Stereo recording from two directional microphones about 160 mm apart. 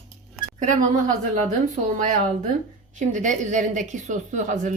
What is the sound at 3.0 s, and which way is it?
A woman's voice, 50° right (ahead or behind).